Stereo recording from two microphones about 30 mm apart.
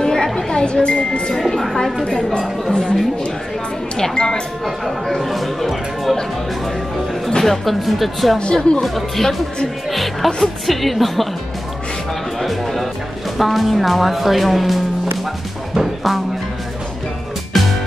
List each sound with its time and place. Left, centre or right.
0.0 s a sound: centre
0.6 s speech: left
1.5 s a woman's voice: centre
4.1 s speech: left
4.6 s speech: centre
7.2 s music: centre
7.8 s speech: centre
12.4 s music: centre
13.4 s speech: centre
15.7 s music: centre
17.5 s music: centre